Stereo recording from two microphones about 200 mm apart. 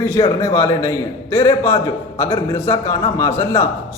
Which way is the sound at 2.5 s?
10° left (ahead or behind).